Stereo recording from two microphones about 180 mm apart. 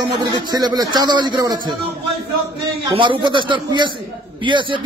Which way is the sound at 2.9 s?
25° right (ahead or behind).